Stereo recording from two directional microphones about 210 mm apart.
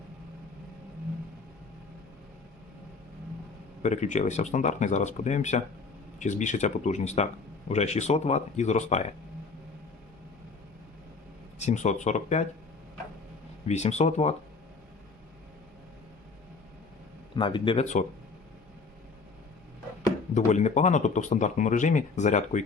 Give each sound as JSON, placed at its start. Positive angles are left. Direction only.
{"t": 3.8, "sound": "speech", "side_deg": 35}
{"t": 11.6, "sound": "speech", "side_deg": 35}
{"t": 13.7, "sound": "speech", "side_deg": 30}
{"t": 17.3, "sound": "speech", "side_deg": 25}
{"t": 20.3, "sound": "speech", "side_deg": 35}